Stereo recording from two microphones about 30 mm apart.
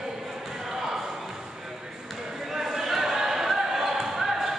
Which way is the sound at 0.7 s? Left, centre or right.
Centre.